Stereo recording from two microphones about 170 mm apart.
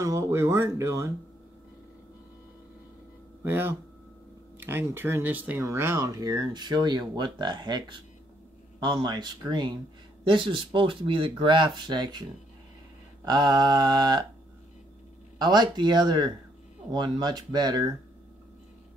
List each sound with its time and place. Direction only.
0.0 s speech: 15° right (ahead or behind)
3.4 s speech: 15° right (ahead or behind)
15.3 s speech: 25° right (ahead or behind)